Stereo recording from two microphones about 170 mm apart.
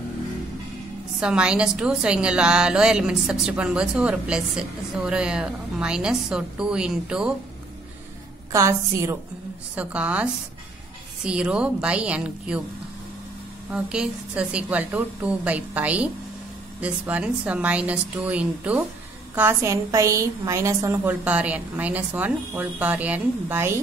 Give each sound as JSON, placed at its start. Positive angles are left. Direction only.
{"t": 1.2, "sound": "a woman's voice", "side_deg": -5}
{"t": 8.5, "sound": "a woman's voice", "side_deg": -15}
{"t": 11.2, "sound": "a woman's voice", "side_deg": -5}
{"t": 13.7, "sound": "a woman's voice", "side_deg": -5}